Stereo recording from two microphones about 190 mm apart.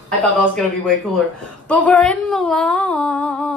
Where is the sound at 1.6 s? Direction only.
5° left (ahead or behind).